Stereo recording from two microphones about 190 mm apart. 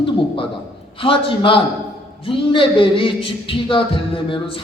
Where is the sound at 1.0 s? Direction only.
25° left (ahead or behind).